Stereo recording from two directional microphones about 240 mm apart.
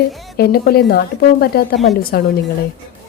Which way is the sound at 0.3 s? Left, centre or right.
Left.